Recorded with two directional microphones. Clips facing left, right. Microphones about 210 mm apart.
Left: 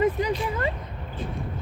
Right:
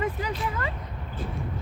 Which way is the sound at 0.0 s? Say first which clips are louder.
Left 6 dB; 20° left (ahead or behind).